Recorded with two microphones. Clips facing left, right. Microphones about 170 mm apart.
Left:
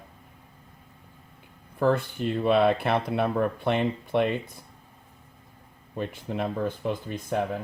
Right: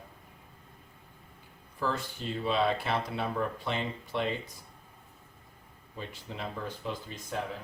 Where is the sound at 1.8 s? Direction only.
60° left (ahead or behind).